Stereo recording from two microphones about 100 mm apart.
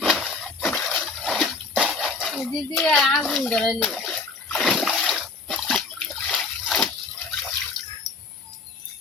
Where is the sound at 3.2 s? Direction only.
Centre (ahead or behind).